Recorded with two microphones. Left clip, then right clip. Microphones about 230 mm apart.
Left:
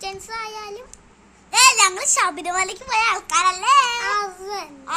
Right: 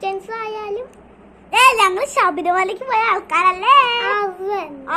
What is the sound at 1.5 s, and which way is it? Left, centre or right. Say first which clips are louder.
A child's voice: right 3 dB; left.